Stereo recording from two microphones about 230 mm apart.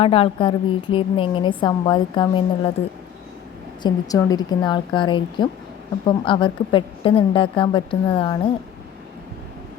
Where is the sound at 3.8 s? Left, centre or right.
Centre.